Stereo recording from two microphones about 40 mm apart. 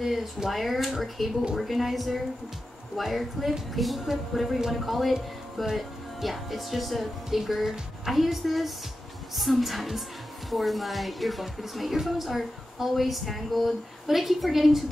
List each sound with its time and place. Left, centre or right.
0.0 s speech: centre